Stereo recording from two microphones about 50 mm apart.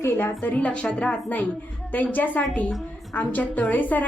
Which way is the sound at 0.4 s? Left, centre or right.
Left.